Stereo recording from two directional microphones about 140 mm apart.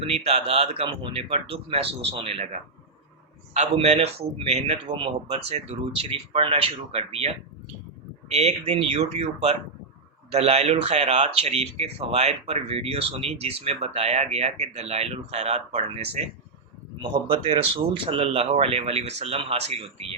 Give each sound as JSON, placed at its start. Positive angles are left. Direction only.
{"t": 0.0, "sound": "speech", "side_deg": -45}
{"t": 4.9, "sound": "speech", "side_deg": -40}
{"t": 17.2, "sound": "speech", "side_deg": -40}